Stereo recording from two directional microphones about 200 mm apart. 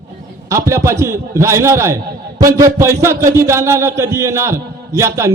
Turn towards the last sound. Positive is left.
turn(degrees=-15)  # may be behind; listen again after turning